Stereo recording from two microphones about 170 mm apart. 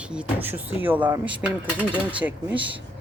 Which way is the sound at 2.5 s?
30° right (ahead or behind).